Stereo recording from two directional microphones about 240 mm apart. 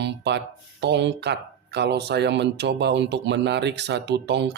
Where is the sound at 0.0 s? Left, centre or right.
Right.